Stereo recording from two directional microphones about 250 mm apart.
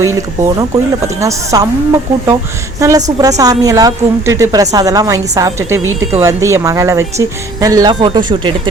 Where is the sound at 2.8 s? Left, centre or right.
Centre.